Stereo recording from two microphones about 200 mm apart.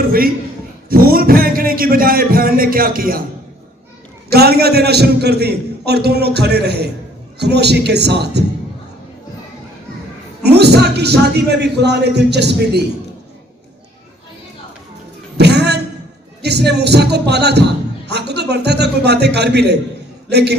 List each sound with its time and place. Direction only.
0.0 s a man's voice: 45° right (ahead or behind)
4.3 s a man's voice: 50° right (ahead or behind)
10.4 s a man's voice: 55° right (ahead or behind)
15.4 s a sound: 55° right (ahead or behind)
16.4 s a man's voice: 55° right (ahead or behind)